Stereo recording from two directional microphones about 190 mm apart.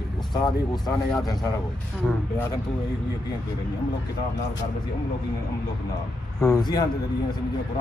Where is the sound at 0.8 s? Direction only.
20° left (ahead or behind).